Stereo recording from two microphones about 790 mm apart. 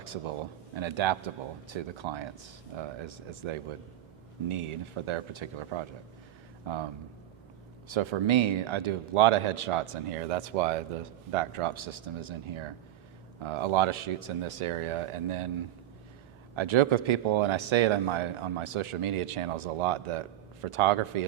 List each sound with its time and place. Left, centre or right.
0.8 s speech: right
7.9 s speech: right
16.6 s speech: right